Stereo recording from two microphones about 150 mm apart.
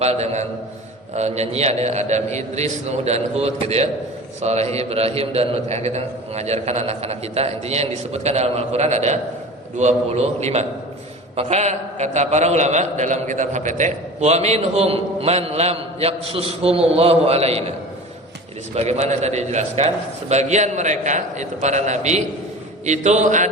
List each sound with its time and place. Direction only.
0.0 s a man's voice: 45° right (ahead or behind)
18.7 s a man's voice: 50° right (ahead or behind)